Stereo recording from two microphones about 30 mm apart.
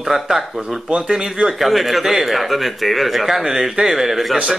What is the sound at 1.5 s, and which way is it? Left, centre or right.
Speech, centre.